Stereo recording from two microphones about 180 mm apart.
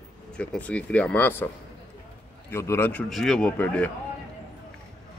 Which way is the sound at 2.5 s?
15° left (ahead or behind).